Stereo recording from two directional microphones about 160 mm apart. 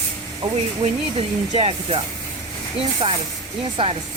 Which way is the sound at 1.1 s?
35° right (ahead or behind).